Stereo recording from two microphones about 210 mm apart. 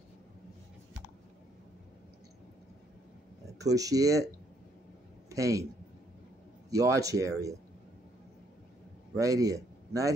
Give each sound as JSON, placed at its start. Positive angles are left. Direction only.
{"t": 3.5, "sound": "speech", "side_deg": -15}
{"t": 5.3, "sound": "a man's voice", "side_deg": -15}
{"t": 6.7, "sound": "speech", "side_deg": -15}
{"t": 9.1, "sound": "speech", "side_deg": -15}